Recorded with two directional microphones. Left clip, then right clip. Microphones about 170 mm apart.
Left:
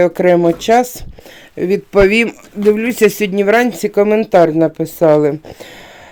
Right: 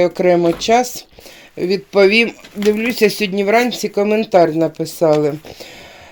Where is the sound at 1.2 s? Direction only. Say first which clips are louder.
Left 2 dB; 20° left (ahead or behind).